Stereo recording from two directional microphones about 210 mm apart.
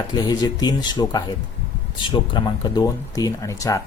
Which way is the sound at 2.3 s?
20° left (ahead or behind).